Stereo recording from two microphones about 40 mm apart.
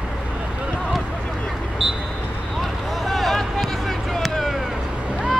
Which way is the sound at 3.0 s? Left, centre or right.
Centre.